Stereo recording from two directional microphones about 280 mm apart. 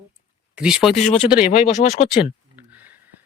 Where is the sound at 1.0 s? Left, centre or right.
Left.